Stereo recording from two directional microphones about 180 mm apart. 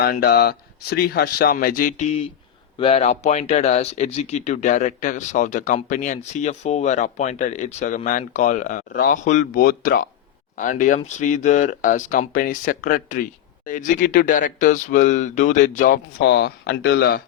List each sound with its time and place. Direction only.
0.0 s speech: 60° left (ahead or behind)
16.2 s speech: 70° left (ahead or behind)